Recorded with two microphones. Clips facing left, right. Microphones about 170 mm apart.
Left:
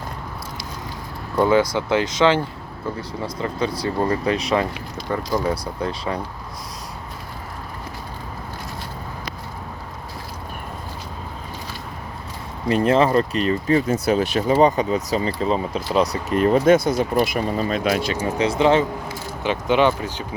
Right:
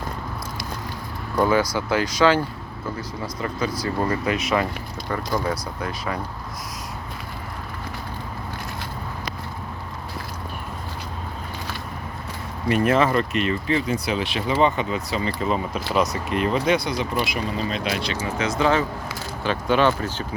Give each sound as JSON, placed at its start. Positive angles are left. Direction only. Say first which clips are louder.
{"t": 1.5, "sound": "speech", "louder": "left 4 dB", "side_deg": 25}
{"t": 12.6, "sound": "speech", "louder": "left 2 dB", "side_deg": 30}
{"t": 16.0, "sound": "speech", "louder": "left 3 dB", "side_deg": 45}
{"t": 18.3, "sound": "speech", "louder": "left 4 dB", "side_deg": 30}